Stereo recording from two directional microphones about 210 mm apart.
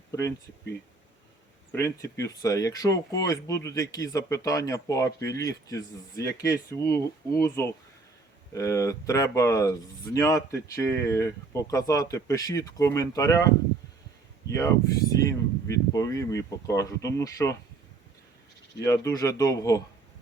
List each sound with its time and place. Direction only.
0.1 s speech: 15° left (ahead or behind)
1.7 s speech: 15° left (ahead or behind)
15.2 s speech: 15° left (ahead or behind)
18.8 s speech: 15° left (ahead or behind)